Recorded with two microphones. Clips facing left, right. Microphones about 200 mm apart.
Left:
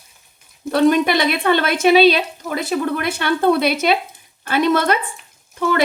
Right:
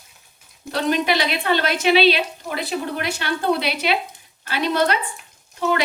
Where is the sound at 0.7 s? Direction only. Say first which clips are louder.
Left 6 dB; 50° left (ahead or behind).